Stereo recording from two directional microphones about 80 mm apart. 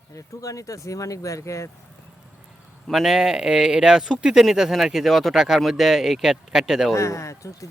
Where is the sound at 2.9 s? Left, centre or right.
Centre.